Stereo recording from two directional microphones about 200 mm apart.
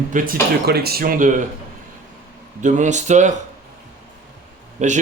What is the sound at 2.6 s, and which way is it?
Speech, 35° right (ahead or behind).